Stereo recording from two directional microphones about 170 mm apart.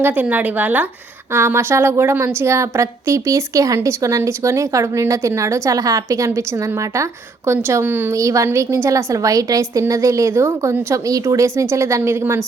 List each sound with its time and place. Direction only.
0.0 s a woman's voice: 10° right (ahead or behind)